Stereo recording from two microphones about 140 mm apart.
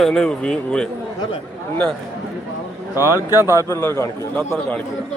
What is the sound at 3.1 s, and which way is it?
Speech, 25° left (ahead or behind).